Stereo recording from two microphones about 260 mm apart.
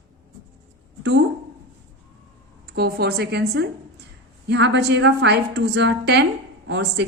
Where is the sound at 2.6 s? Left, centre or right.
Right.